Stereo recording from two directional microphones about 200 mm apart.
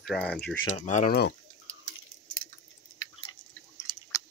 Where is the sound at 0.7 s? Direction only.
35° left (ahead or behind).